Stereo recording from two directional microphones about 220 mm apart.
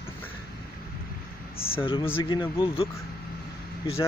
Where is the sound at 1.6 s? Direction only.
25° left (ahead or behind).